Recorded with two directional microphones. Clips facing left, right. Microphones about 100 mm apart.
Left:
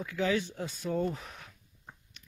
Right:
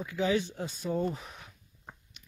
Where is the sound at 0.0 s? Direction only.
15° right (ahead or behind).